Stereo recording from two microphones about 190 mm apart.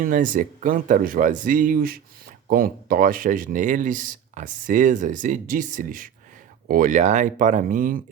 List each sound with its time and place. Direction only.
0.0 s speech: 45° right (ahead or behind)